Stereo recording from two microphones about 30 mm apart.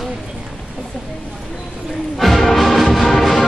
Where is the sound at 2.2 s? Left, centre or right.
Centre.